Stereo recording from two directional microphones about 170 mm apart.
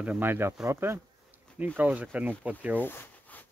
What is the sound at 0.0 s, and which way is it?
Speech, 10° right (ahead or behind).